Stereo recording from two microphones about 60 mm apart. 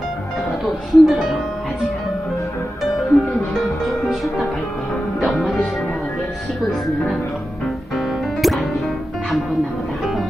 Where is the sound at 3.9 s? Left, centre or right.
Centre.